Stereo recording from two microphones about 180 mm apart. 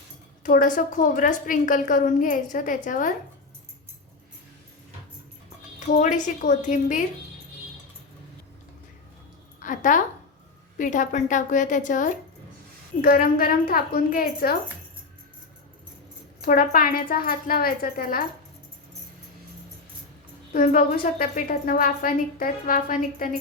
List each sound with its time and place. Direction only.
0.4 s a woman's voice: 45° left (ahead or behind)
5.8 s a woman's voice: 45° left (ahead or behind)
9.6 s a sound: 45° left (ahead or behind)
10.8 s a woman's voice: 45° left (ahead or behind)
13.0 s a woman's voice: 55° left (ahead or behind)
16.4 s a woman's voice: 55° left (ahead or behind)
20.5 s a woman's voice: 50° left (ahead or behind)